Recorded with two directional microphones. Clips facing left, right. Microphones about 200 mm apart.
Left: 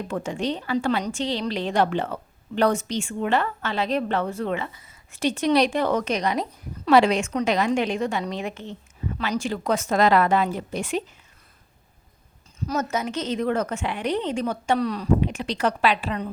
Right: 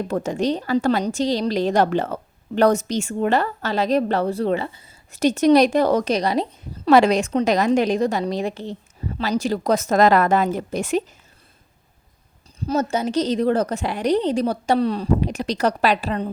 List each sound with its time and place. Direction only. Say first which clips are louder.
0.1 s a woman's voice: right 5 dB; 40° right (ahead or behind)
5.2 s a woman's voice: right 6 dB; 40° right (ahead or behind)
12.5 s a woman's voice: right 4 dB; 30° right (ahead or behind)